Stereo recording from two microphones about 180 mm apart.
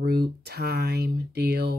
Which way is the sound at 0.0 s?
60° right (ahead or behind).